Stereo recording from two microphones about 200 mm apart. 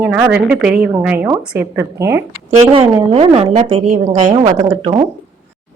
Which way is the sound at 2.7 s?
25° right (ahead or behind).